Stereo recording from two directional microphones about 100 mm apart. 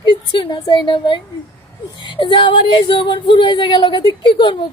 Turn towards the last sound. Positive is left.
turn(degrees=50)  # may be behind; listen again after turning